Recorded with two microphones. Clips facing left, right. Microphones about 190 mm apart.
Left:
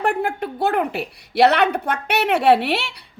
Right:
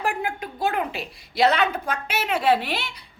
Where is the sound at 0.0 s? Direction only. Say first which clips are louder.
Left 6 dB; 65° left (ahead or behind).